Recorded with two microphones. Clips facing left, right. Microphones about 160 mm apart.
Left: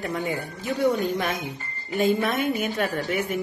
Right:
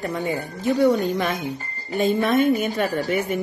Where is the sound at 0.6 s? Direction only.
40° right (ahead or behind).